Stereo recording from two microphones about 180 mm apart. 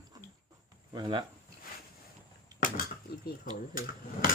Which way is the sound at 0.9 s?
25° right (ahead or behind).